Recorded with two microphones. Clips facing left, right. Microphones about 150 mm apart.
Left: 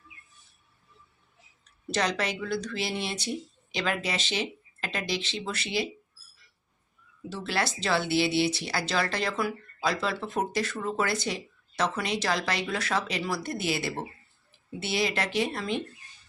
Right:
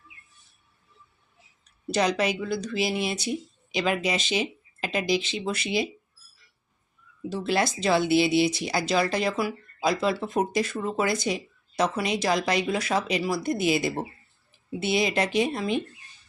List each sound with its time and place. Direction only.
1.9 s speech: 10° right (ahead or behind)
7.3 s speech: 15° right (ahead or behind)